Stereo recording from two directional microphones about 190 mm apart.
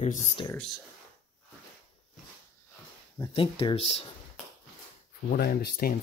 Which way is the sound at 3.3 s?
30° left (ahead or behind).